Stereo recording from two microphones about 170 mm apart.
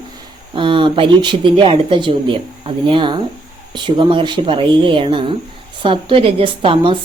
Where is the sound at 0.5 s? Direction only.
30° right (ahead or behind).